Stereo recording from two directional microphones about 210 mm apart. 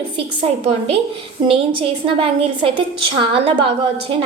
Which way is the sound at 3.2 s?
25° right (ahead or behind).